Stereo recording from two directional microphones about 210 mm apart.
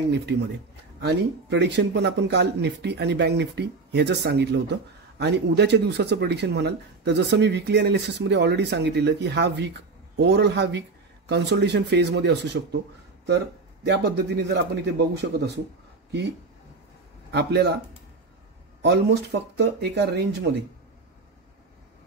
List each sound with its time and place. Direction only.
0.1 s speech: 55° right (ahead or behind)
17.3 s speech: 50° right (ahead or behind)
18.8 s speech: 55° right (ahead or behind)